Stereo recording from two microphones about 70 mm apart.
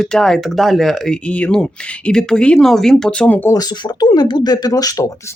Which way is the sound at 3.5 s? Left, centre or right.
Left.